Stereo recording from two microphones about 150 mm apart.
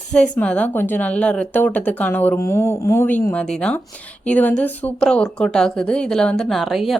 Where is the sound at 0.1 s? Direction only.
5° left (ahead or behind).